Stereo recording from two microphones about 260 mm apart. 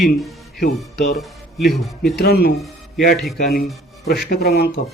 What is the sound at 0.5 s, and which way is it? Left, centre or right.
Speech, left.